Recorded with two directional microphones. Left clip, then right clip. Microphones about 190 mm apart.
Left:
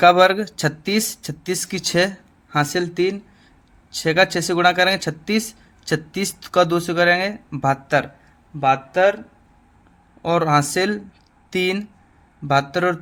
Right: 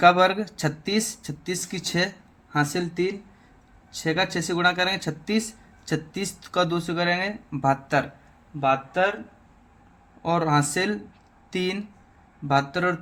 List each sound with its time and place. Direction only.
0.0 s speech: 30° left (ahead or behind)
10.2 s speech: 35° left (ahead or behind)